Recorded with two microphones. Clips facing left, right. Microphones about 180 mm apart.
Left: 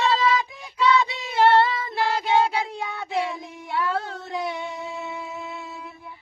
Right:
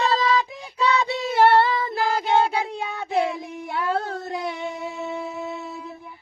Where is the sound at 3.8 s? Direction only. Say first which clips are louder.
Right 3 dB; 30° right (ahead or behind).